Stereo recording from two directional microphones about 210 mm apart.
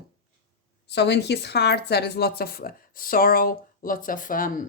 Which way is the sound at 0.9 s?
55° left (ahead or behind).